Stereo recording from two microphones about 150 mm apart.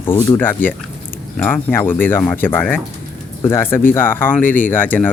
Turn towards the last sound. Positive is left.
turn(degrees=10)  # may be behind; listen again after turning